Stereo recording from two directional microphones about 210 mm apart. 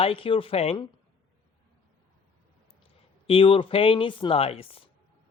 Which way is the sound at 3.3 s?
25° left (ahead or behind).